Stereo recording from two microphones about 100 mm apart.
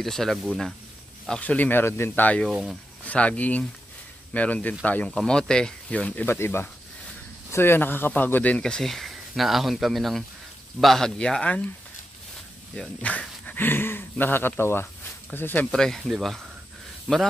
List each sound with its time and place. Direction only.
0.0 s speech: 5° left (ahead or behind)
2.4 s speech: centre (ahead or behind)
3.1 s speech: 15° left (ahead or behind)
12.7 s speech: 10° left (ahead or behind)
15.7 s speech: 5° left (ahead or behind)